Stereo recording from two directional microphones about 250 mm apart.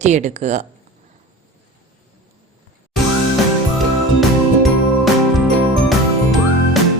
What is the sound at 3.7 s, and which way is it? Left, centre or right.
Music, centre.